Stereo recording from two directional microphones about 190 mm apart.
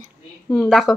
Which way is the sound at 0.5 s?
Centre (ahead or behind).